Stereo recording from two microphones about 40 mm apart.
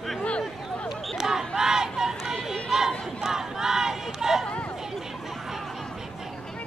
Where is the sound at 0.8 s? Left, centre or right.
Centre.